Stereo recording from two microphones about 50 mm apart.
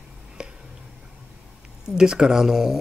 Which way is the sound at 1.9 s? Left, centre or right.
Centre.